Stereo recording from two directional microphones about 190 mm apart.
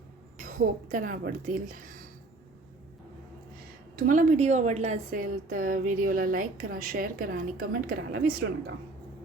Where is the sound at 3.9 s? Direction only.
45° right (ahead or behind).